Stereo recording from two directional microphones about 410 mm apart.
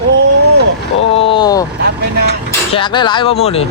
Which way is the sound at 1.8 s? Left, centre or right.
Right.